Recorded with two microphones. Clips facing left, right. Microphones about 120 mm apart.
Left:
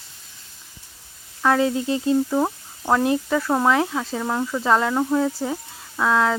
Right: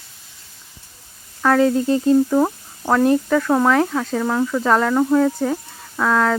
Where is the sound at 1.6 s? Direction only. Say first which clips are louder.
Right 5 dB; 40° right (ahead or behind).